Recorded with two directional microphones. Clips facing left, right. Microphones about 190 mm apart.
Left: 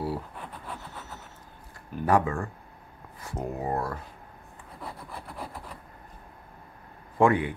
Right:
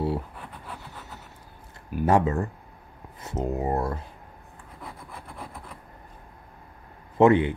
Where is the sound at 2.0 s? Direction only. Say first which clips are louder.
Right 2 dB; 25° right (ahead or behind).